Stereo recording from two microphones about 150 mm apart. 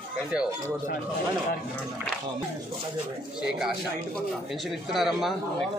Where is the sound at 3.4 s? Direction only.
5° right (ahead or behind).